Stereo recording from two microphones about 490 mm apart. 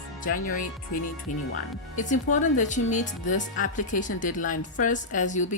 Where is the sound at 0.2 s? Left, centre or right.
Centre.